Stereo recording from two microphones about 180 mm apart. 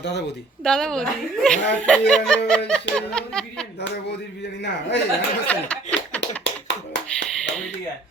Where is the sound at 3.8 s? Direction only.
70° left (ahead or behind).